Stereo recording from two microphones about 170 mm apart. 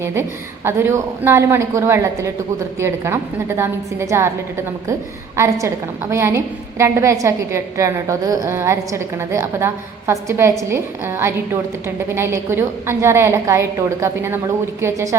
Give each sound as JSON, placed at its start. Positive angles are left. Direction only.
{"t": 0.0, "sound": "a woman's voice", "side_deg": -15}
{"t": 5.4, "sound": "a woman's voice", "side_deg": -15}